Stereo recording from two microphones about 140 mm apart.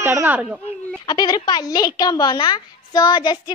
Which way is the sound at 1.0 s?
30° left (ahead or behind).